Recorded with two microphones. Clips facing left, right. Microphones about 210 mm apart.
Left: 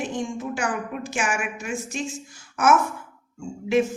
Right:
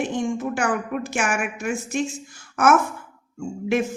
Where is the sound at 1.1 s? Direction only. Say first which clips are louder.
Right 1 dB; 60° right (ahead or behind).